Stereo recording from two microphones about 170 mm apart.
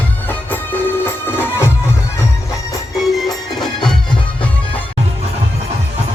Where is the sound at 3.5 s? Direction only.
Centre (ahead or behind).